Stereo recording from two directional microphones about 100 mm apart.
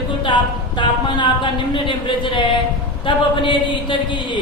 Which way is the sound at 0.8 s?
50° left (ahead or behind).